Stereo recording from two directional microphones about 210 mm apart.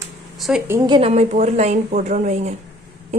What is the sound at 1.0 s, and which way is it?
A woman's voice, 30° right (ahead or behind).